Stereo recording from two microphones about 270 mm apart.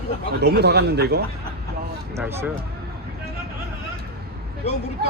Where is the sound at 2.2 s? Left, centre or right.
Centre.